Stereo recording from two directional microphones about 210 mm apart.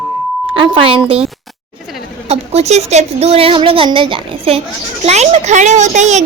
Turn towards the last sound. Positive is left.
turn(degrees=-35)  # may be behind; listen again after turning